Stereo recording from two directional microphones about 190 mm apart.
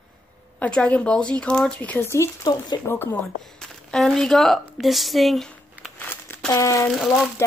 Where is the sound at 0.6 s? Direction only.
5° left (ahead or behind).